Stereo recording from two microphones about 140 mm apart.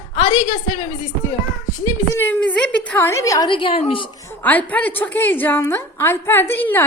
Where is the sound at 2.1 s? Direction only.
15° left (ahead or behind).